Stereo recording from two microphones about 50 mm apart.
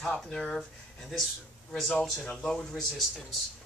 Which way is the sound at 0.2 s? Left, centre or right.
Centre.